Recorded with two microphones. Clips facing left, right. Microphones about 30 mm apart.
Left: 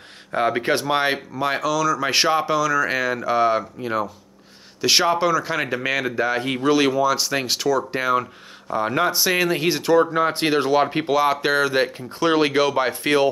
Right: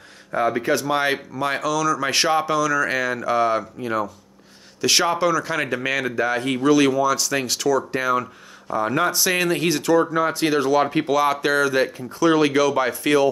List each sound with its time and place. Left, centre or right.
0.3 s speech: left
0.8 s speech: left
1.3 s speech: centre; by 10.8 s left
10.8 s speech: centre